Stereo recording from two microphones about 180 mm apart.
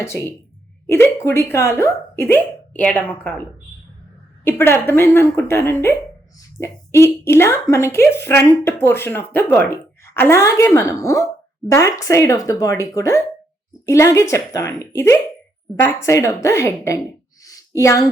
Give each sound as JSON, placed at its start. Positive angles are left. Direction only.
{"t": 0.0, "sound": "speech", "side_deg": 15}
{"t": 4.4, "sound": "speech", "side_deg": 15}
{"t": 17.4, "sound": "a sound", "side_deg": 20}